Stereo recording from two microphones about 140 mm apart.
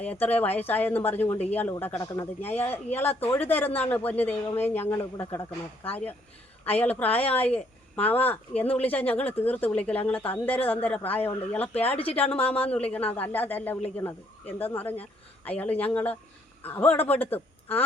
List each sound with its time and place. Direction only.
0.0 s speech: 10° left (ahead or behind)
7.2 s speech: 45° left (ahead or behind)
7.4 s speech: 10° left (ahead or behind)
11.8 s speech: 45° left (ahead or behind)
12.5 s speech: 10° left (ahead or behind)